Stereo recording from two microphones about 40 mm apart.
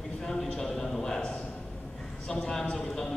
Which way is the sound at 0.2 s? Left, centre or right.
Centre.